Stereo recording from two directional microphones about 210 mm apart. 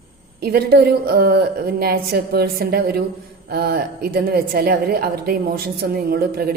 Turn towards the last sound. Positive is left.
turn(degrees=-45)  # may be behind; listen again after turning